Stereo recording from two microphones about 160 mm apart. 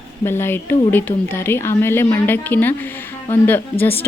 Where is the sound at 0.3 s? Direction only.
15° left (ahead or behind).